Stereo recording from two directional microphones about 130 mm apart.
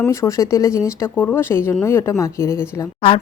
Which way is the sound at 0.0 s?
25° left (ahead or behind).